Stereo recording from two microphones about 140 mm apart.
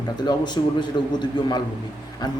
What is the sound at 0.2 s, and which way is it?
A man's voice, 30° left (ahead or behind).